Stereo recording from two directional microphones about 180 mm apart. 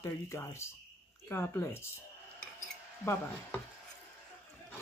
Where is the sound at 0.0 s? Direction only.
15° left (ahead or behind).